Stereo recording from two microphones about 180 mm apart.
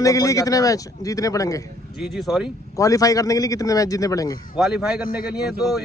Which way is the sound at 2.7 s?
20° left (ahead or behind).